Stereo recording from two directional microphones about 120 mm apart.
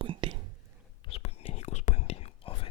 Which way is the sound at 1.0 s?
55° left (ahead or behind).